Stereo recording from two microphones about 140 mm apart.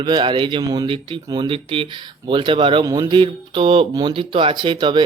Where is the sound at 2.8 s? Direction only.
25° right (ahead or behind).